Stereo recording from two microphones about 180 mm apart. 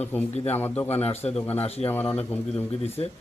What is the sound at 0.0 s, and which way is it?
Speech, 10° left (ahead or behind).